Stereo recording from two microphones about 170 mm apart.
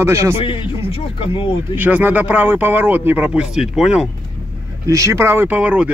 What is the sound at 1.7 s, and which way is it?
Speech, 10° right (ahead or behind).